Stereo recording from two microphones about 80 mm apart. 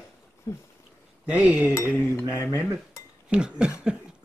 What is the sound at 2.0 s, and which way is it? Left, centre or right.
Cutlery, left.